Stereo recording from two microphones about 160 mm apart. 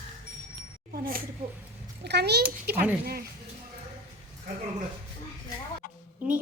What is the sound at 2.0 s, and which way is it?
Speech, 90° right.